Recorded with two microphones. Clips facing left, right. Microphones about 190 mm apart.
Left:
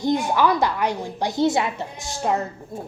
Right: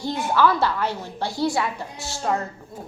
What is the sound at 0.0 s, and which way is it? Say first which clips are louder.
A woman's voice: left 1 dB; 15° left (ahead or behind).